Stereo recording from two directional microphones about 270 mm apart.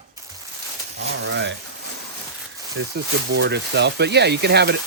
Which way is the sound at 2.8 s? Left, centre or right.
Right.